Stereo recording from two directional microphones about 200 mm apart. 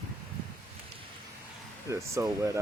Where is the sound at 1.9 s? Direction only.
15° right (ahead or behind).